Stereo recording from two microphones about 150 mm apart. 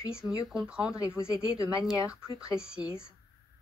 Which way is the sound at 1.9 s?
5° right (ahead or behind).